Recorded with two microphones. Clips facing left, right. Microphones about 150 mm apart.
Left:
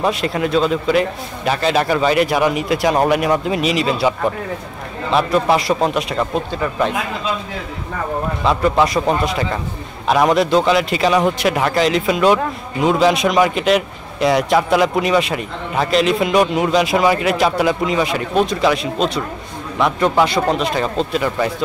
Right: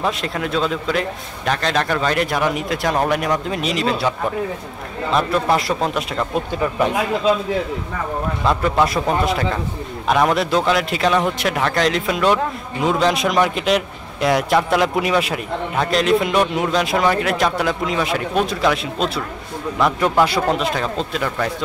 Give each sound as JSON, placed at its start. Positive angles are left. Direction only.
{"t": 0.0, "sound": "a man's voice", "side_deg": 5}
{"t": 5.1, "sound": "a man's voice", "side_deg": 5}
{"t": 6.5, "sound": "speech", "side_deg": -15}
{"t": 8.5, "sound": "a man's voice", "side_deg": 0}